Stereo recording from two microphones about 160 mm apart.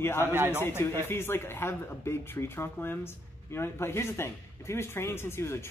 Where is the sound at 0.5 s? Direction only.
15° left (ahead or behind).